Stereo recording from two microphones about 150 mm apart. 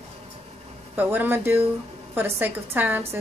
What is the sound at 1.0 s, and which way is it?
A woman's voice, 10° right (ahead or behind).